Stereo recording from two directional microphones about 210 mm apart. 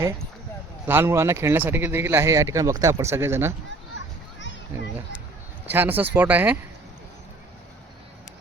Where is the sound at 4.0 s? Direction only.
60° left (ahead or behind).